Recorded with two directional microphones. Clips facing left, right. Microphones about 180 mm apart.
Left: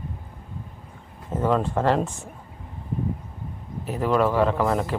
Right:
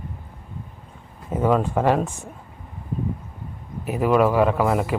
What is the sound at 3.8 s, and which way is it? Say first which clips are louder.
A man's voice: right 3 dB; 10° right (ahead or behind).